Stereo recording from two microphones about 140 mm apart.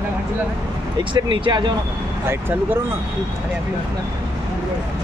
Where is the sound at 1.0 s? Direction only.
35° right (ahead or behind).